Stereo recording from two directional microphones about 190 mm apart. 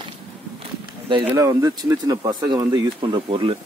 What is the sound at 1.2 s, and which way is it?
Speech, 15° right (ahead or behind).